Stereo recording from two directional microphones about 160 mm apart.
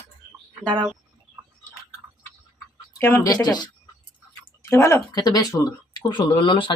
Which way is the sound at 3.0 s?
15° left (ahead or behind).